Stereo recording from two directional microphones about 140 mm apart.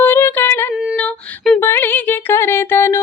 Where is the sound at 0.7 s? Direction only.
5° right (ahead or behind).